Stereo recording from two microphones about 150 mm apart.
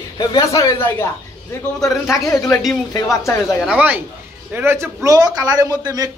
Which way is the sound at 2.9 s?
20° left (ahead or behind).